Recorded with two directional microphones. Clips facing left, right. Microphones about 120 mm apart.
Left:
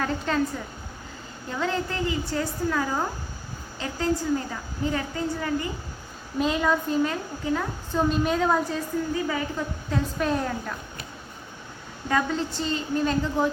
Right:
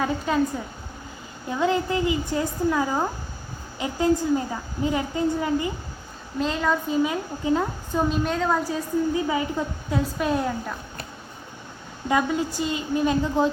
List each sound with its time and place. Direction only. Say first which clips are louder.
0.0 s a woman's voice: right 2 dB; 10° right (ahead or behind)
1.5 s a woman's voice: right 5 dB; 15° right (ahead or behind)
6.4 s a woman's voice: even; 5° left (ahead or behind)
7.0 s a woman's voice: right 2 dB; 15° right (ahead or behind)
7.9 s a woman's voice: even; centre (ahead or behind)
9.1 s a woman's voice: right 3 dB; 20° right (ahead or behind)
9.9 s a woman's voice: right 2 dB; 5° right (ahead or behind)
12.0 s a woman's voice: right 2 dB; 10° right (ahead or behind)